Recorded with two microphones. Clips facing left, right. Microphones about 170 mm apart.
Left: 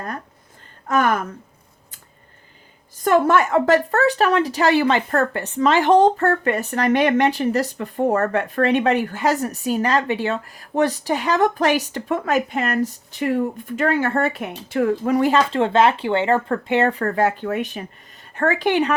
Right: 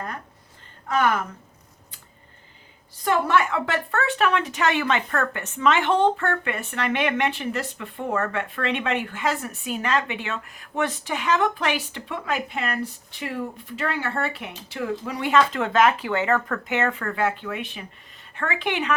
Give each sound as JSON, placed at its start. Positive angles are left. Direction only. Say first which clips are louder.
{"t": 0.9, "sound": "speech", "louder": "left 3 dB", "side_deg": 45}
{"t": 3.0, "sound": "a woman's voice", "louder": "left 5 dB", "side_deg": 45}
{"t": 15.3, "sound": "a woman's voice", "louder": "left 3 dB", "side_deg": 30}